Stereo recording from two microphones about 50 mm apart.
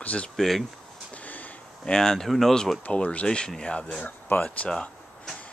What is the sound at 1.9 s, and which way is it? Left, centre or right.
Speech, centre.